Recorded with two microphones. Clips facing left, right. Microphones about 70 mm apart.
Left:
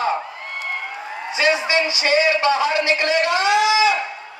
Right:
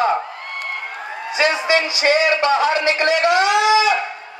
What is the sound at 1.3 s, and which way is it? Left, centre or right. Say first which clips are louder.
A man's voice: right 1 dB; right.